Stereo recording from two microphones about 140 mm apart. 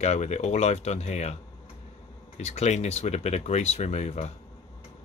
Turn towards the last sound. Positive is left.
turn(degrees=50)  # may be behind; listen again after turning